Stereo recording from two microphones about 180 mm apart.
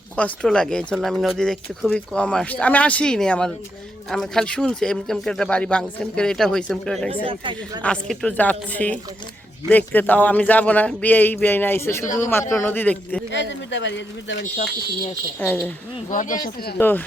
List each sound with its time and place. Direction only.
0.2 s speech: 5° left (ahead or behind)
7.3 s speech: 25° right (ahead or behind)
7.8 s a man's voice: 5° left (ahead or behind)
13.3 s speech: 85° left
15.4 s a man's voice: 10° left (ahead or behind)
16.0 s speech: 45° left (ahead or behind)
16.7 s a man's voice: 10° left (ahead or behind)